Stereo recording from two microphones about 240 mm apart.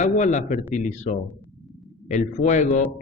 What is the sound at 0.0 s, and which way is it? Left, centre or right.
A man's voice, left.